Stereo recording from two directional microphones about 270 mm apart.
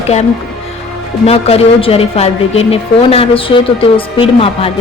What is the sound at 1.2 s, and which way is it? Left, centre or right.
A woman's voice, left.